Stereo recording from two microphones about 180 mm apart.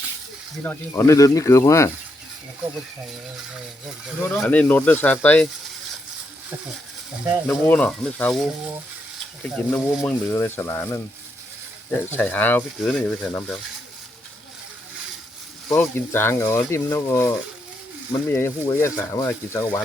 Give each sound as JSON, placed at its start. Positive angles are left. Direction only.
{"t": 0.6, "sound": "speech", "side_deg": 15}
{"t": 4.2, "sound": "speech", "side_deg": 10}
{"t": 7.4, "sound": "speech", "side_deg": 5}
{"t": 15.7, "sound": "speech", "side_deg": 10}